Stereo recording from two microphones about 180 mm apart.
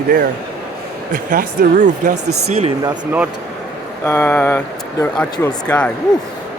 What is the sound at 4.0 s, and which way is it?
Speech, 15° left (ahead or behind).